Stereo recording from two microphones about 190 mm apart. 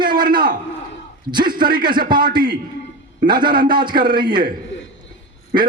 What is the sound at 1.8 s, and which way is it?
Speech, 25° right (ahead or behind).